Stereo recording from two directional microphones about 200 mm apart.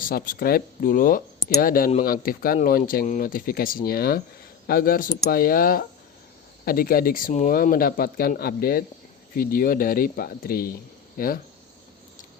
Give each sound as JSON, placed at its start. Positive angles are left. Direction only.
{"t": 0.1, "sound": "speech", "side_deg": 45}